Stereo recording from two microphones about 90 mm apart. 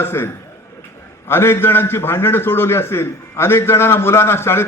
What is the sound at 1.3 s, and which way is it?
Speech, 25° left (ahead or behind).